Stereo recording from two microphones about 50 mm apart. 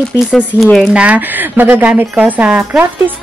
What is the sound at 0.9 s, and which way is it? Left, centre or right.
Speech, right.